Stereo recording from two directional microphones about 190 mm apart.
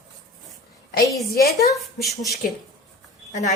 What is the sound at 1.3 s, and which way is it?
Speech, 55° left (ahead or behind).